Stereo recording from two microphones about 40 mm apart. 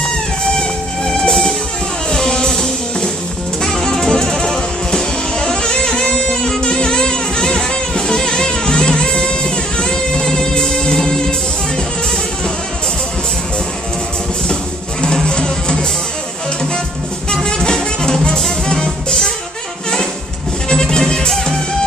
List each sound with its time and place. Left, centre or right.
0.0 s music: left
6.3 s music: centre
14.5 s music: left
17.5 s music: centre
20.6 s music: centre